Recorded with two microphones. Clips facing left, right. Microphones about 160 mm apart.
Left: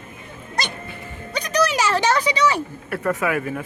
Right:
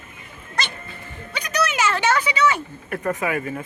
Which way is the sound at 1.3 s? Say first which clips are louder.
Left 3 dB; 35° left (ahead or behind).